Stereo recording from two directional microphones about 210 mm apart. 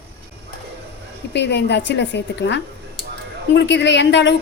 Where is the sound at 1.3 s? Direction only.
55° left (ahead or behind).